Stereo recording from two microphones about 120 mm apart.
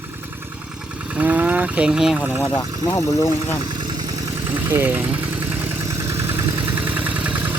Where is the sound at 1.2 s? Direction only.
15° right (ahead or behind).